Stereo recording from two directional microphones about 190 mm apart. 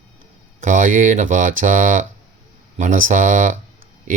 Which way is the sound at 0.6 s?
45° right (ahead or behind).